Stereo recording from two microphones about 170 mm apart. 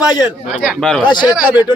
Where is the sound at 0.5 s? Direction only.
5° right (ahead or behind).